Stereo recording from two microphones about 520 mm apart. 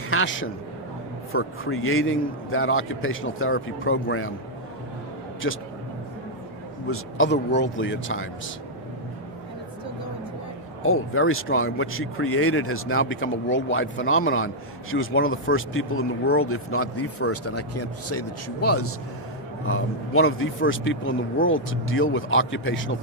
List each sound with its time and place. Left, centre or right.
0.1 s a man's voice: left
5.4 s speech: left
6.9 s speech: left
10.8 s speech: left